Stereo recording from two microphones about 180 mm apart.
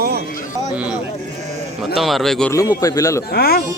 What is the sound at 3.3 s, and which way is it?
Speech, 60° left (ahead or behind).